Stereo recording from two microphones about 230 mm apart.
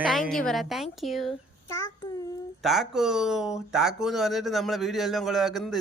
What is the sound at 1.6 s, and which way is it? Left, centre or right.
Child singing, centre.